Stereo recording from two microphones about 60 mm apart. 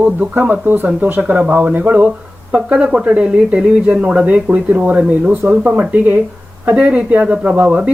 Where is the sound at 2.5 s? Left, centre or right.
Centre.